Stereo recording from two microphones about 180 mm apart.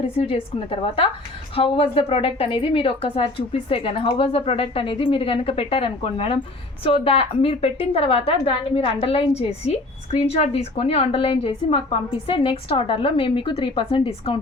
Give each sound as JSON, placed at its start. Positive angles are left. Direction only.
{"t": 0.2, "sound": "a woman's voice", "side_deg": 30}